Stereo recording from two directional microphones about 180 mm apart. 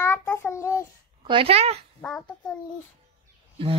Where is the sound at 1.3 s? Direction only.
30° right (ahead or behind).